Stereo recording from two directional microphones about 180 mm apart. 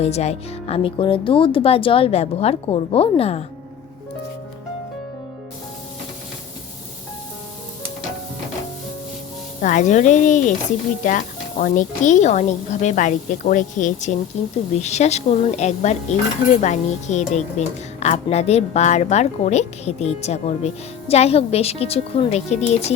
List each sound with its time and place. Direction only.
0.0 s speech: 35° left (ahead or behind)
9.6 s speech: 45° left (ahead or behind)